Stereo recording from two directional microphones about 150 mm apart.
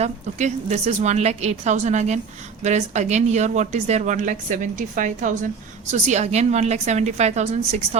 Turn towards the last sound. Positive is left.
turn(degrees=-45)  # may be behind; listen again after turning